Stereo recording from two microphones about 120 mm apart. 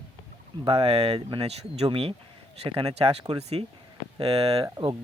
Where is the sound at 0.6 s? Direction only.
50° right (ahead or behind).